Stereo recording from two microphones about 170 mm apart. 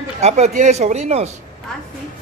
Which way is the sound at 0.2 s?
40° right (ahead or behind).